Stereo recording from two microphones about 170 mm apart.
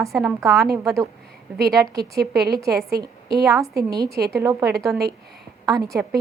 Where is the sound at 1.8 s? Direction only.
20° right (ahead or behind).